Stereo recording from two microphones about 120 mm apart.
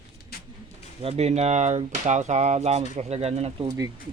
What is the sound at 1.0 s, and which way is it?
Speech, 65° right (ahead or behind).